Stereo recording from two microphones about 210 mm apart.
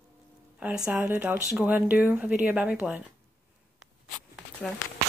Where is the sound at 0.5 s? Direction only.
5° right (ahead or behind).